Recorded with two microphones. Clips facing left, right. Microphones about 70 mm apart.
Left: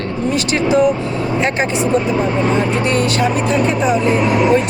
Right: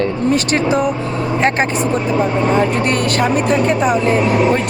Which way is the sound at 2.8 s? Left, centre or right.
Right.